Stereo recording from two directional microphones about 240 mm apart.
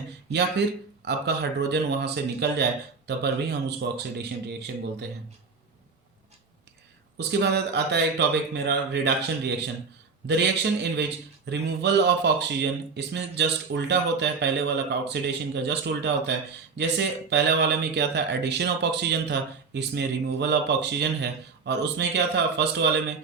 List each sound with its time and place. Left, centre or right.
0.3 s speech: right
7.2 s speech: right